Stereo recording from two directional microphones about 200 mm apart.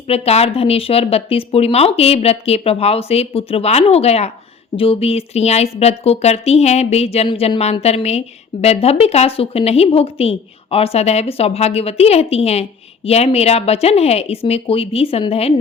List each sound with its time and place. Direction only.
0.1 s speech: 30° left (ahead or behind)